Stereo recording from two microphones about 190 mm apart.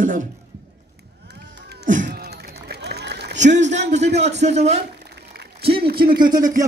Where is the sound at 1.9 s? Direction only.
45° right (ahead or behind); by 3.2 s 60° right (ahead or behind).